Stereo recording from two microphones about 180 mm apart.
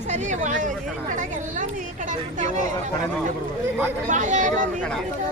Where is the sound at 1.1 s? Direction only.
45° right (ahead or behind).